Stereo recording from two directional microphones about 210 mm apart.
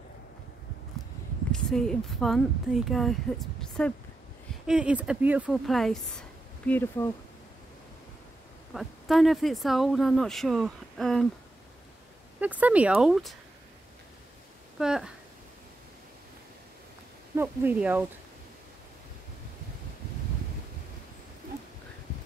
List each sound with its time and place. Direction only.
1.5 s speech: 5° left (ahead or behind)
8.7 s speech: centre (ahead or behind)
12.4 s speech: 5° right (ahead or behind)
14.8 s speech: 5° right (ahead or behind)
17.4 s speech: 10° right (ahead or behind)